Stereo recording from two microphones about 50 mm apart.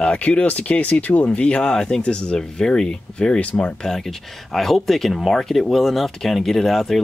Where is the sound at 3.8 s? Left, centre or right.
Centre.